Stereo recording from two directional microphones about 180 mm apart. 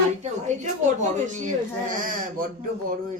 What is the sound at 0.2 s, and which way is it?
Speech, 40° right (ahead or behind).